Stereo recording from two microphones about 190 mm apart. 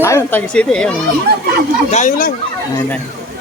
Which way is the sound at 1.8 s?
40° left (ahead or behind).